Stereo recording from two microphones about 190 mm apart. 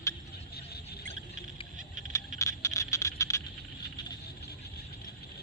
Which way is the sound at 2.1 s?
15° left (ahead or behind).